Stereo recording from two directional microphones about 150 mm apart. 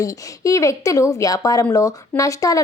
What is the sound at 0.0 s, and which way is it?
Speech, 20° left (ahead or behind).